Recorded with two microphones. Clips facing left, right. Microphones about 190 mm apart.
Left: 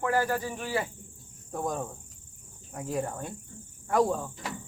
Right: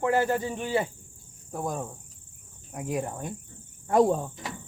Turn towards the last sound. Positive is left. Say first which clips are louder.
# right 4 dB
turn(degrees=-25)  # may be behind; listen again after turning